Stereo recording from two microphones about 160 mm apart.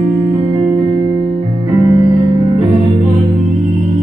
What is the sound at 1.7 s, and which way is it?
Music, 20° right (ahead or behind).